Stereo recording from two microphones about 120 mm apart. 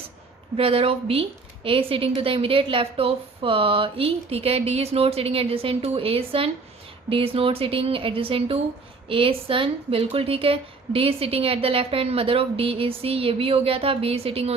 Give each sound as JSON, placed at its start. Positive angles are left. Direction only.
{"t": 0.5, "sound": "a woman's voice", "side_deg": -50}